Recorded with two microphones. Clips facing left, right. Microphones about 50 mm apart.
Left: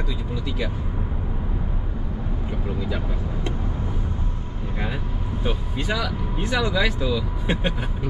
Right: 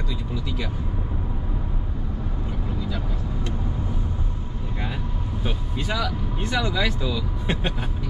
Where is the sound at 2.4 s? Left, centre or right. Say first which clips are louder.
Left 3 dB; centre.